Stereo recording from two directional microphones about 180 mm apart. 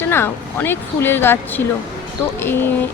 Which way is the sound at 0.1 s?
10° left (ahead or behind).